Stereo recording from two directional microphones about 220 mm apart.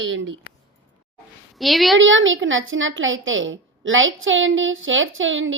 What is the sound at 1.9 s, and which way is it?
A woman's voice, 60° right (ahead or behind).